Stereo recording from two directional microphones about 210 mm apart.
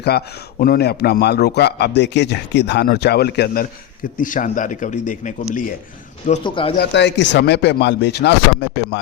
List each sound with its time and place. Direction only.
0.0 s a man's voice: 50° left (ahead or behind)
6.4 s speech: 25° left (ahead or behind)
6.7 s speech: 55° left (ahead or behind)